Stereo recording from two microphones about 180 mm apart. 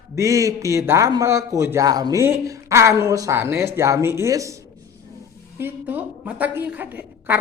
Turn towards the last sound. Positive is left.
turn(degrees=-10)  # may be behind; listen again after turning